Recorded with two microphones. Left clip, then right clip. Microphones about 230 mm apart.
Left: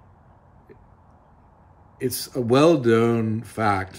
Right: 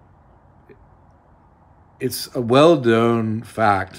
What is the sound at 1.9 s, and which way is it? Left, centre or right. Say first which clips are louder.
Speech: right 2 dB; centre.